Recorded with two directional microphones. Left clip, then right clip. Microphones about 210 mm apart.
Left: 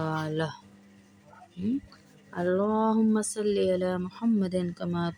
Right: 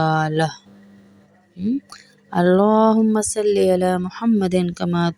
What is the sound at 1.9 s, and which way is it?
Speech, 40° right (ahead or behind).